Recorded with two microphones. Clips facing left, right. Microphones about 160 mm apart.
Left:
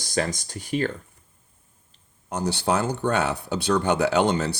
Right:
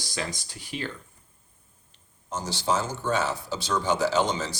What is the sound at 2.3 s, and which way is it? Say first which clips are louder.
Speech: left 4 dB; 60° left (ahead or behind).